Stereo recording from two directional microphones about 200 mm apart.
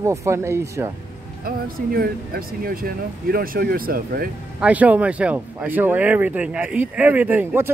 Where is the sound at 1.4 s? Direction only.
50° right (ahead or behind).